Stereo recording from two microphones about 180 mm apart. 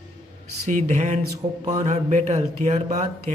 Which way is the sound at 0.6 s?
45° right (ahead or behind).